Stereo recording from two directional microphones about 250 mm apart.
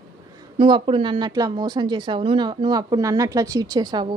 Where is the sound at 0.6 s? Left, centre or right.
Centre.